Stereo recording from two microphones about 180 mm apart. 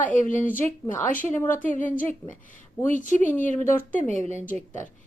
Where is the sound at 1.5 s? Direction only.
45° left (ahead or behind).